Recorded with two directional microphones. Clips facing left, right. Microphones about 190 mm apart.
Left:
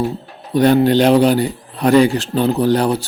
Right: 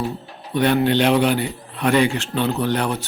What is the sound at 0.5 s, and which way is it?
A man's voice, 40° left (ahead or behind).